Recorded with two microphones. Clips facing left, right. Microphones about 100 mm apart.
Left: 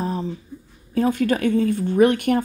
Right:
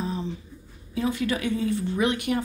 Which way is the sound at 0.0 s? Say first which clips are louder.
Left 5 dB; 45° left (ahead or behind).